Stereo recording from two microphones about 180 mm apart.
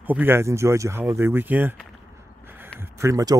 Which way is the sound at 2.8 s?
15° right (ahead or behind).